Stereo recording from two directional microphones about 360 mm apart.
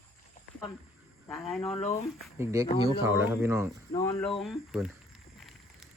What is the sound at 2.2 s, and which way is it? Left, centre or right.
Speech, centre.